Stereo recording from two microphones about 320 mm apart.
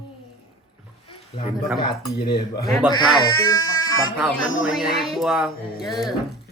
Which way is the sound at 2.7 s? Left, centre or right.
Centre.